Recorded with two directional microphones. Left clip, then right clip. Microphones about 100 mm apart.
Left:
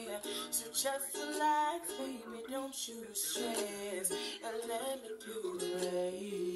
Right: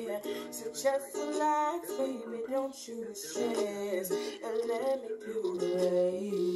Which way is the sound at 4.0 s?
Centre (ahead or behind).